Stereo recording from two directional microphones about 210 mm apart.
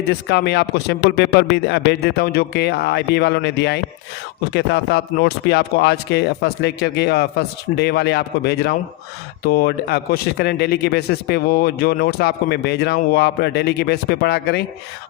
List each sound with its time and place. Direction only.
0.1 s speech: 55° left (ahead or behind)